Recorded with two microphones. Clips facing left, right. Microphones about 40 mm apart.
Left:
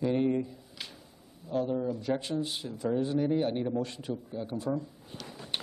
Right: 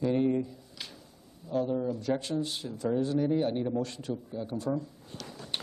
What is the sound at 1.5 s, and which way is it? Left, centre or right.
A man's voice, centre.